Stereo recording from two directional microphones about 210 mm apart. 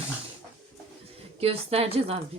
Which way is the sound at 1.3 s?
30° right (ahead or behind).